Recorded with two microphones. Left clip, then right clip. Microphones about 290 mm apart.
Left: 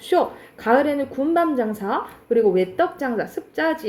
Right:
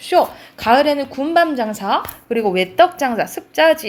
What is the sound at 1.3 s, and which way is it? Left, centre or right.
Speech, centre.